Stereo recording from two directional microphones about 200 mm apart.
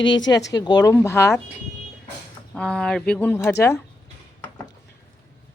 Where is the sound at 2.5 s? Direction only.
5° left (ahead or behind).